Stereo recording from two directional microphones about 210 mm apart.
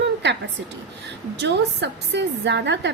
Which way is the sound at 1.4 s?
55° right (ahead or behind).